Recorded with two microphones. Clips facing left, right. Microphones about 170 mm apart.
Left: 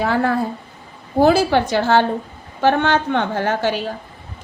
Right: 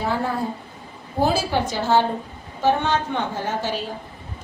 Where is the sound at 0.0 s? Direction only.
75° left (ahead or behind).